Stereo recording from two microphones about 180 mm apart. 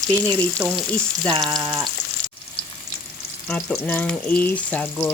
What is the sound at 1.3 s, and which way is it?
Frying, 25° right (ahead or behind).